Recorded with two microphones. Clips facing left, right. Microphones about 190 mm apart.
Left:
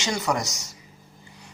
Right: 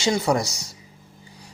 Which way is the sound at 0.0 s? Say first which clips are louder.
Right 5 dB; 30° right (ahead or behind).